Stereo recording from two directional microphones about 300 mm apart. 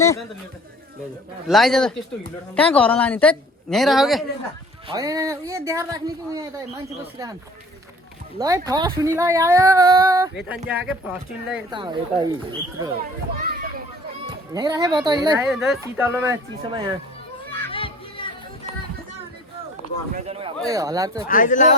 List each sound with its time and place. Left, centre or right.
0.0 s a man's voice: centre
1.5 s a woman's voice: centre
4.9 s speech: centre
8.4 s a woman's voice: centre
11.7 s speech: centre
13.3 s children playing: right
14.3 s speech: centre
15.4 s speech: centre
17.7 s a sound: centre
20.1 s a man's voice: right
21.2 s speech: left